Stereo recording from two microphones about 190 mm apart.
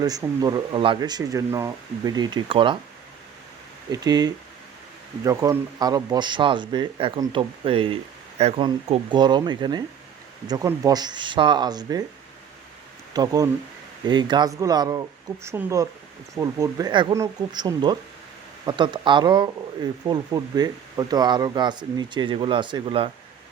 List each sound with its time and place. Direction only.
0.0 s speech: 20° right (ahead or behind)
3.9 s speech: 20° right (ahead or behind)
13.1 s speech: 20° right (ahead or behind)